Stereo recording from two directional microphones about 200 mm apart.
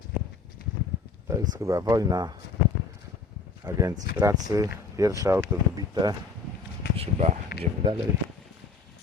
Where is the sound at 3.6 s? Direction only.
15° right (ahead or behind).